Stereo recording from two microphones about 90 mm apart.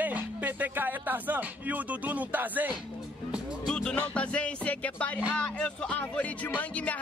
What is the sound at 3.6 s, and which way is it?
Music, 5° left (ahead or behind).